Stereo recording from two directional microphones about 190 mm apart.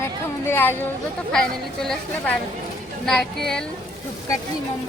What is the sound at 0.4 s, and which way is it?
A woman's voice, 10° left (ahead or behind).